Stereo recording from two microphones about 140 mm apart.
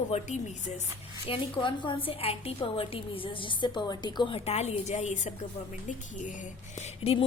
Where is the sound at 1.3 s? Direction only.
35° left (ahead or behind); by 5.3 s 55° left (ahead or behind).